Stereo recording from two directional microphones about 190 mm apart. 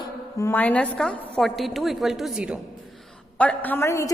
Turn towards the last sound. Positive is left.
turn(degrees=15)  # may be behind; listen again after turning